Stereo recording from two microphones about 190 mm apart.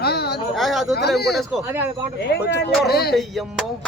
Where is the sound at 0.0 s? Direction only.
55° left (ahead or behind).